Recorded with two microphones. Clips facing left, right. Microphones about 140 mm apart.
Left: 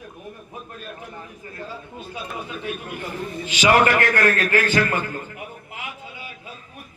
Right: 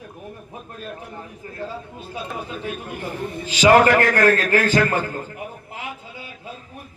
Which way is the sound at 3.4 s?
35° right (ahead or behind).